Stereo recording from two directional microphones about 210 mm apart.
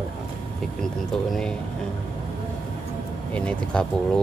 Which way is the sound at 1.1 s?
Centre (ahead or behind).